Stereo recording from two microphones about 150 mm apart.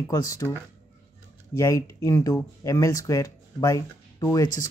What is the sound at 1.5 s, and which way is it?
Speech, 20° left (ahead or behind).